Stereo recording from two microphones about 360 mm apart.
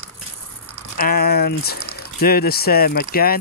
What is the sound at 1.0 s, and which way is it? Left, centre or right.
Speech, left.